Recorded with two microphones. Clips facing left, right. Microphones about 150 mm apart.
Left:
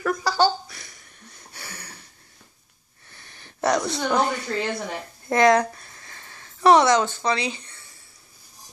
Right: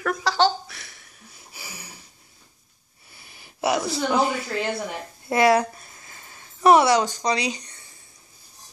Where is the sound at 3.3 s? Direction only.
5° right (ahead or behind).